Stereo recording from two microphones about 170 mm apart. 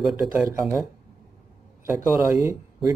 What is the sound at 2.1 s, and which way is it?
Speech, 15° right (ahead or behind).